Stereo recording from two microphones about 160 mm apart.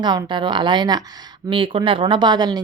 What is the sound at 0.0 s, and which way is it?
A woman's voice, 25° right (ahead or behind).